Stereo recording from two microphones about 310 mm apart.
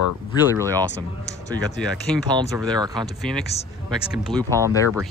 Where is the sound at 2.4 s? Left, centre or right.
Centre.